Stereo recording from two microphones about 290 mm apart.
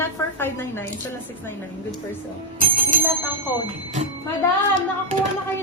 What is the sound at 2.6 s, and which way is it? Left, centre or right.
Bicycle bell, right.